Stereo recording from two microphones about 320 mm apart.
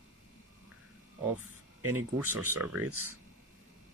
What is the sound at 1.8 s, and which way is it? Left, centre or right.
Speech, right.